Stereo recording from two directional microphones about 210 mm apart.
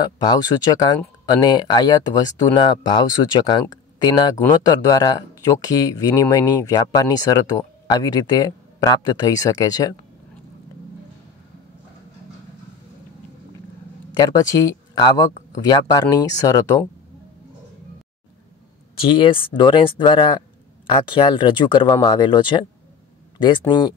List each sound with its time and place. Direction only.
0.0 s speech: 20° left (ahead or behind)
14.1 s speech: 15° left (ahead or behind)
18.9 s speech: 25° left (ahead or behind)